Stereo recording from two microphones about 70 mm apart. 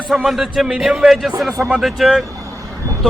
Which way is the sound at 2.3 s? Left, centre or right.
Right.